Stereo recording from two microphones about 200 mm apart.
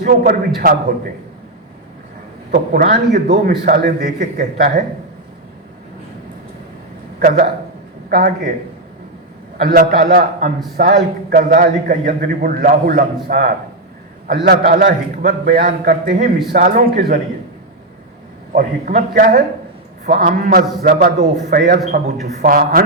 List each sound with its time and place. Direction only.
0.0 s a man's voice: 45° right (ahead or behind)
2.5 s a man's voice: 50° right (ahead or behind)
7.2 s a man's voice: 50° right (ahead or behind)
9.6 s a man's voice: 50° right (ahead or behind)
18.5 s a man's voice: 45° right (ahead or behind)